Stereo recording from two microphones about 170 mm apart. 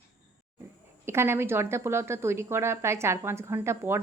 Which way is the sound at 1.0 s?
15° right (ahead or behind).